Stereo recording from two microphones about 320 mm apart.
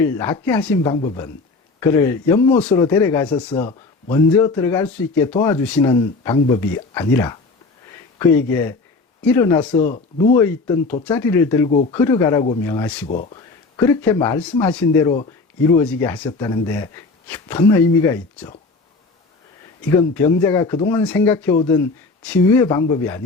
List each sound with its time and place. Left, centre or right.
0.0 s speech: centre
3.5 s speech: centre
9.8 s speech: left
10.3 s speech: centre
13.1 s speech: left
20.1 s speech: centre